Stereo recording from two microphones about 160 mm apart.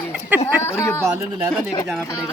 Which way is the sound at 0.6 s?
15° left (ahead or behind).